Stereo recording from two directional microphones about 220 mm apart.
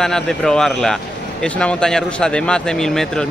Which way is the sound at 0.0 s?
Centre (ahead or behind).